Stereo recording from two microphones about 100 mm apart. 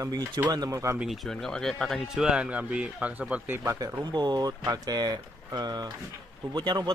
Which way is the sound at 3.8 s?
45° right (ahead or behind).